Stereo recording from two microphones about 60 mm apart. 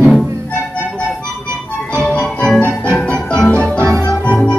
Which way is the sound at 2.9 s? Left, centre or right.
Centre.